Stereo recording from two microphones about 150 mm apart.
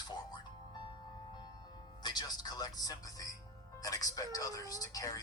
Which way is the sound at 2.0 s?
25° left (ahead or behind).